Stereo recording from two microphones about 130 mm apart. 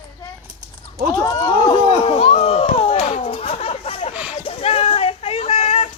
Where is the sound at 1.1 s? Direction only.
25° left (ahead or behind); by 4.1 s 50° left (ahead or behind).